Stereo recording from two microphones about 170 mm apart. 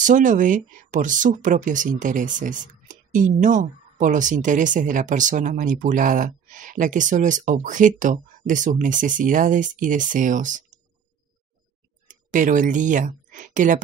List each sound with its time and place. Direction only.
0.0 s speech: 50° right (ahead or behind)
12.1 s speech: 50° right (ahead or behind)